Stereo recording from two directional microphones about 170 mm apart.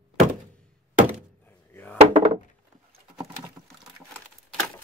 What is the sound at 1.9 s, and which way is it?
Wood, 40° right (ahead or behind).